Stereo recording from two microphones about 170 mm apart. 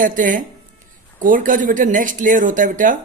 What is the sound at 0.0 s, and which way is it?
A man's voice, 50° right (ahead or behind).